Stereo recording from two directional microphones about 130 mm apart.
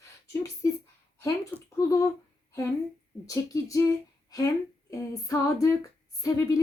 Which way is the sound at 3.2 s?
25° left (ahead or behind).